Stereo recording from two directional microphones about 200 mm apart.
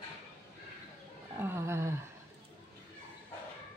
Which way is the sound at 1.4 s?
15° right (ahead or behind).